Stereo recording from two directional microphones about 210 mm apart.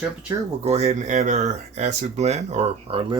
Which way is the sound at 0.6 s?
30° right (ahead or behind).